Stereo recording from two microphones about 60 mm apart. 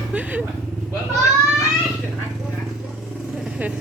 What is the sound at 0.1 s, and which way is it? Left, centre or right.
Speech, right.